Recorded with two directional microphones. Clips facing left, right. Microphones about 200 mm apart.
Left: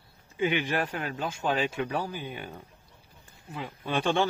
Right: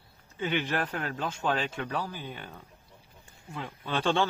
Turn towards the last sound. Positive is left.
turn(degrees=15)  # may be behind; listen again after turning